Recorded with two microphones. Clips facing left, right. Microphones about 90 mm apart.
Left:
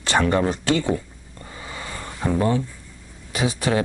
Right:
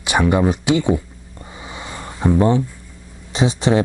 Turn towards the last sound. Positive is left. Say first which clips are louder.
# right 5 dB
turn(degrees=-25)  # may be behind; listen again after turning